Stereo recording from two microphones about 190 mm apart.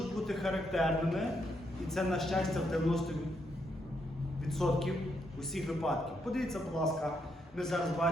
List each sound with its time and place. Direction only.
0.0 s a man's voice: centre (ahead or behind)
4.4 s a man's voice: centre (ahead or behind)